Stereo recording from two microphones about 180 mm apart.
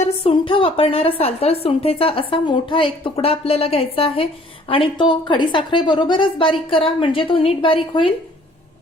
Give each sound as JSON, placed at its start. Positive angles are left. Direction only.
{"t": 0.0, "sound": "a woman's voice", "side_deg": 30}